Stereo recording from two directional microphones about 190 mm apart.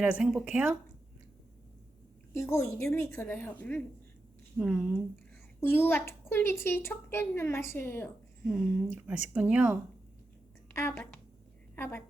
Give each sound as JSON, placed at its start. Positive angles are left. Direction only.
{"t": 0.0, "sound": "speech", "side_deg": -5}
{"t": 2.3, "sound": "a woman's voice", "side_deg": 15}
{"t": 4.5, "sound": "a woman's voice", "side_deg": -5}
{"t": 5.5, "sound": "a woman's voice", "side_deg": 10}
{"t": 8.9, "sound": "speech", "side_deg": -10}
{"t": 10.8, "sound": "a woman's voice", "side_deg": 10}